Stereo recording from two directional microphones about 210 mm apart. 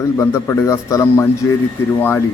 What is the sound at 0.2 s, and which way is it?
Speech, 15° left (ahead or behind).